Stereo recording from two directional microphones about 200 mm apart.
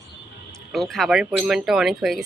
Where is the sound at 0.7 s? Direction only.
Centre (ahead or behind).